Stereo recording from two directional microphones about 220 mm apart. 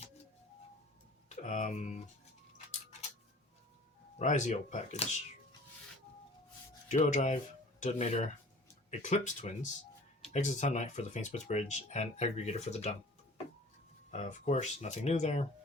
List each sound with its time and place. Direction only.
1.4 s speech: 35° left (ahead or behind)
4.2 s speech: 35° left (ahead or behind)
6.8 s speech: 30° left (ahead or behind)
14.1 s speech: 30° left (ahead or behind)